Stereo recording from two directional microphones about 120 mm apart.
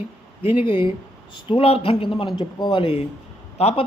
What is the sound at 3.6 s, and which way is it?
Speech, 60° left (ahead or behind).